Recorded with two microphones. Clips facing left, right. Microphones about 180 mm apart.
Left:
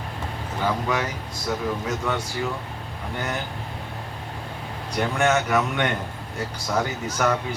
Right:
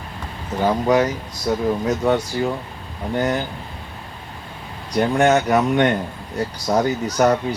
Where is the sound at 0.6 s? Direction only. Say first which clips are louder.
Right 8 dB; 40° right (ahead or behind).